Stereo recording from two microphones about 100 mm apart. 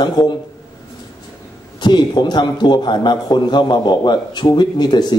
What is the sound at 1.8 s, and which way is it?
A man's voice, 45° left (ahead or behind).